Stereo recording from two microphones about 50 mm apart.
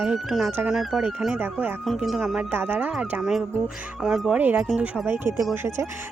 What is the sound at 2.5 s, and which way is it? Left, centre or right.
Speech, right.